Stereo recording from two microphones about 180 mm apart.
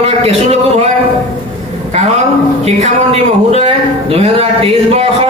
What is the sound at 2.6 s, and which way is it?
Speech, 35° right (ahead or behind).